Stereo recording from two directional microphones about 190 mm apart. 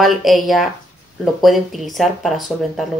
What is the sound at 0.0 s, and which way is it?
Speech, centre (ahead or behind).